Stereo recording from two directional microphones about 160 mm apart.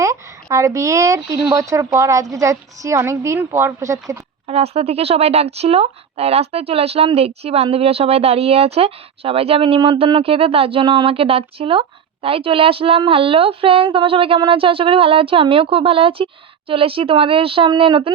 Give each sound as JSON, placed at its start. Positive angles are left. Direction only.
{"t": 0.0, "sound": "a woman's voice", "side_deg": -20}
{"t": 4.4, "sound": "speech", "side_deg": -40}